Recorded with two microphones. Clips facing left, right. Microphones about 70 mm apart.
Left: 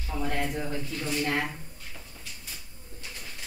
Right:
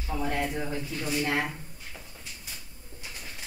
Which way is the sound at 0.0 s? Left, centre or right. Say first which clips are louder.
Right 1 dB; centre.